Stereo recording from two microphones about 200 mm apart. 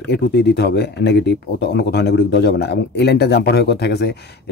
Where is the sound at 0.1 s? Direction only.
55° left (ahead or behind).